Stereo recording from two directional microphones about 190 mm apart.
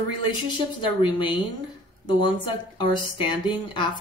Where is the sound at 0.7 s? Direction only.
25° left (ahead or behind).